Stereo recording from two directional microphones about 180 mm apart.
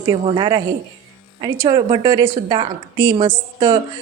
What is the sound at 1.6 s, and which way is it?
A woman's voice, 25° right (ahead or behind).